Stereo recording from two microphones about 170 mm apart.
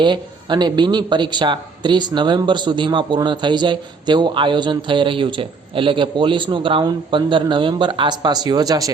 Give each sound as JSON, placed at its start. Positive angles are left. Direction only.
{"t": 0.0, "sound": "speech", "side_deg": -25}